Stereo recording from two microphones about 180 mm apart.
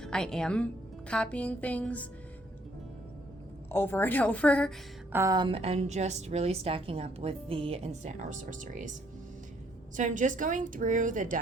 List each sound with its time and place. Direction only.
0.0 s a woman's voice: 5° left (ahead or behind)
3.7 s a woman's voice: 15° left (ahead or behind)
5.1 s a woman's voice: 20° right (ahead or behind); by 11.3 s 45° right (ahead or behind)